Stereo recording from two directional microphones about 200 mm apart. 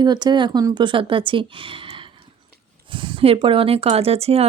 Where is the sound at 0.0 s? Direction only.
20° right (ahead or behind).